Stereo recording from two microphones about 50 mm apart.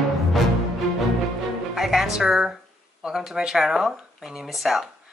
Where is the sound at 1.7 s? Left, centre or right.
Centre.